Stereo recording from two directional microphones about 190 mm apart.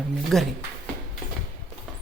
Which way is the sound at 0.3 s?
Centre (ahead or behind).